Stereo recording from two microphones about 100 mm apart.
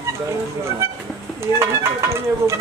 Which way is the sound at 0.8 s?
25° right (ahead or behind).